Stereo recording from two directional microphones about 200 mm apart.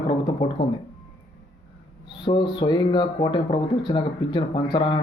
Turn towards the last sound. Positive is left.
turn(degrees=25)  # may be behind; listen again after turning